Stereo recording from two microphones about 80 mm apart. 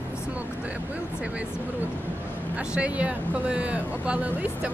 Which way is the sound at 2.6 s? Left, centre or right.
Centre.